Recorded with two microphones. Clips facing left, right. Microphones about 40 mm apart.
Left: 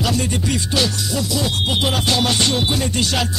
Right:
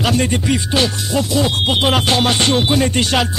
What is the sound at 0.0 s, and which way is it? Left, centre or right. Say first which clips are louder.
Music: right 4 dB; right.